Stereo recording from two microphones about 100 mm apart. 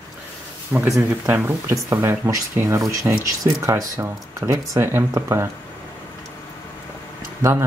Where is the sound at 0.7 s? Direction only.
20° right (ahead or behind).